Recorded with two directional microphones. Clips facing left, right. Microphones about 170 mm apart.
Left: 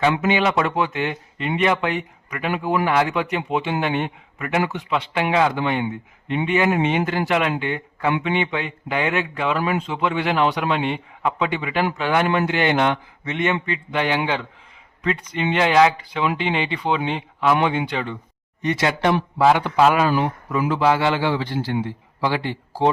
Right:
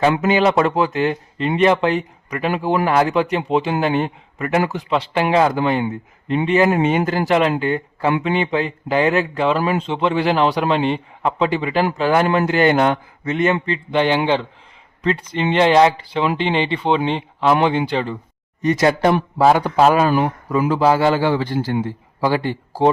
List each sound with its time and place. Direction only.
0.0 s a man's voice: 40° right (ahead or behind)